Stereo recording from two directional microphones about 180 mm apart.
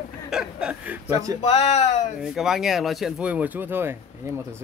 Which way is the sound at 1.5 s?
40° left (ahead or behind).